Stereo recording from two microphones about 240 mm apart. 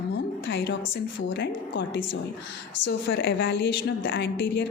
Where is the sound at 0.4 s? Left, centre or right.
Left.